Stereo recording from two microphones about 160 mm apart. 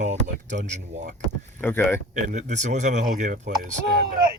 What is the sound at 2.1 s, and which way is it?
Speech, 50° right (ahead or behind).